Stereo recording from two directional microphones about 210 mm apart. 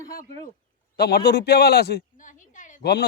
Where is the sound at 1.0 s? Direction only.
50° left (ahead or behind).